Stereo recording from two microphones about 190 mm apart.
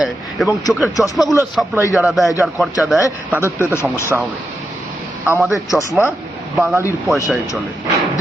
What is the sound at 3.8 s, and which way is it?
Speech, 15° left (ahead or behind).